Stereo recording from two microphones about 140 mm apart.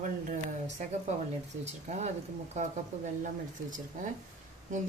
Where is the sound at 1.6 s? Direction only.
55° right (ahead or behind).